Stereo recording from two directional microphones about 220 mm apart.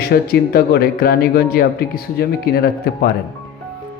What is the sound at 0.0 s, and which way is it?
Speech, 45° left (ahead or behind).